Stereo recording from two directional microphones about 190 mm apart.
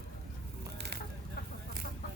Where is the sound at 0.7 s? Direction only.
60° right (ahead or behind).